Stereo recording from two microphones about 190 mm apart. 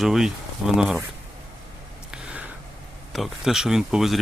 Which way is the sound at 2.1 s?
5° right (ahead or behind).